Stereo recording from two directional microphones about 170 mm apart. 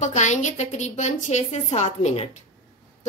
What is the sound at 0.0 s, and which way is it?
A woman's voice, 45° left (ahead or behind).